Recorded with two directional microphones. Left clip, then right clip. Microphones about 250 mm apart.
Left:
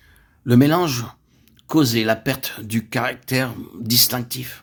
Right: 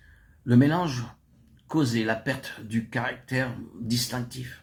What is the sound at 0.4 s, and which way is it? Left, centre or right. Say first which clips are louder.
Speech: left 7 dB; left.